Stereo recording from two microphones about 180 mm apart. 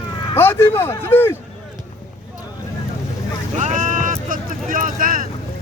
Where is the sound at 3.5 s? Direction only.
45° right (ahead or behind).